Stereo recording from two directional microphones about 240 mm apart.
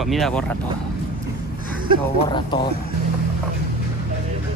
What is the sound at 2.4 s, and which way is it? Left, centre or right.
Speech, centre.